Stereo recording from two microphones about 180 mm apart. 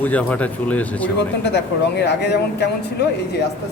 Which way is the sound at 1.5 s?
70° left (ahead or behind).